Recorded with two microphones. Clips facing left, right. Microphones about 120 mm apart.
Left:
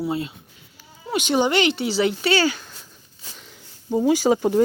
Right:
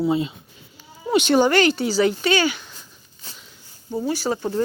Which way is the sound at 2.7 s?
5° left (ahead or behind).